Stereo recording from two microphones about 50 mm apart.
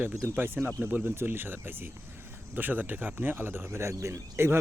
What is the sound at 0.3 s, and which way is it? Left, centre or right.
Speech, right.